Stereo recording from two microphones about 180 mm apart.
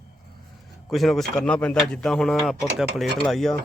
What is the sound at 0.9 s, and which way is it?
Speech, centre (ahead or behind).